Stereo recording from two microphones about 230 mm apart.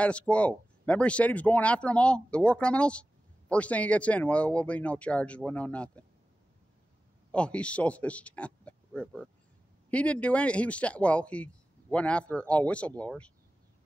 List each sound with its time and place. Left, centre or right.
0.0 s speech: centre
7.3 s speech: centre